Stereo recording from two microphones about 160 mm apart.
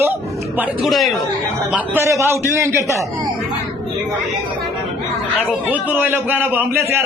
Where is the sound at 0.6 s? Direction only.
Centre (ahead or behind).